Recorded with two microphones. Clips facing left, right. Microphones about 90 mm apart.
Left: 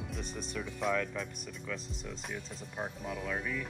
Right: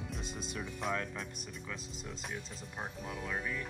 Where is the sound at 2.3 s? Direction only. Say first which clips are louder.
Left 2 dB; 5° right (ahead or behind).